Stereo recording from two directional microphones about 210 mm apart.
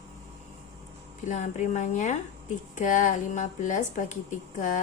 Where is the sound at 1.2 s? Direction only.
35° left (ahead or behind).